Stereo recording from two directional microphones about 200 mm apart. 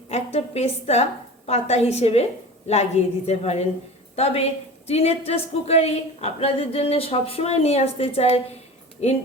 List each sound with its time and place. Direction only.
0.1 s a woman's voice: 35° left (ahead or behind)